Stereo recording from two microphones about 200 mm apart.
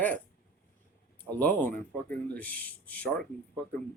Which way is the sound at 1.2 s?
10° left (ahead or behind).